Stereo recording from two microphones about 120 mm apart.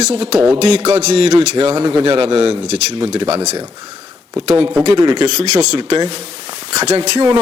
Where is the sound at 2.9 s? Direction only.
50° right (ahead or behind).